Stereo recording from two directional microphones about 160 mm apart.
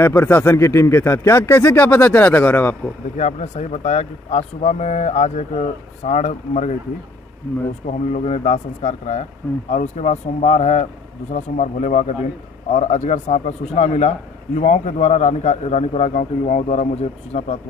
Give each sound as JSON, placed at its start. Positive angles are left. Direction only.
{"t": 0.0, "sound": "speech", "side_deg": 15}
{"t": 3.2, "sound": "a man's voice", "side_deg": 45}
{"t": 7.8, "sound": "a man's voice", "side_deg": 45}